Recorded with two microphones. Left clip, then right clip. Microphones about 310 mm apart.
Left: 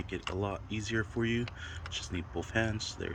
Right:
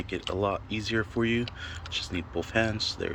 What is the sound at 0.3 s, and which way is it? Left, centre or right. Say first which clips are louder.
Speech: right 8 dB; centre.